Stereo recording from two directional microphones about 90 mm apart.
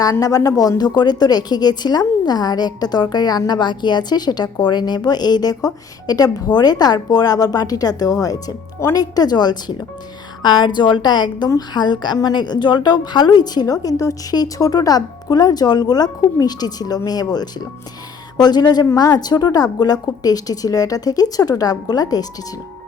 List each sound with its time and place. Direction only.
0.0 s a woman's voice: 40° left (ahead or behind)